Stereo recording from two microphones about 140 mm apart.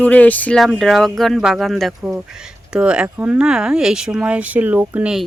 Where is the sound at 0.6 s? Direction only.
Centre (ahead or behind).